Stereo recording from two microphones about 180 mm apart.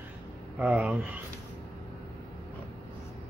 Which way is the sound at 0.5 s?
5° right (ahead or behind).